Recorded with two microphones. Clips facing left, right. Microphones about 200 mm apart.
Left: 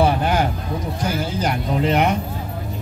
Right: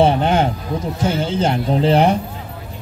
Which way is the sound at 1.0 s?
25° right (ahead or behind).